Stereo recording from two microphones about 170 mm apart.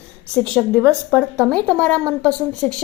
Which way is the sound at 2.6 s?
5° left (ahead or behind).